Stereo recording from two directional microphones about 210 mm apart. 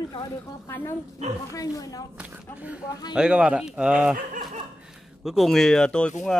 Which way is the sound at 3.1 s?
5° right (ahead or behind).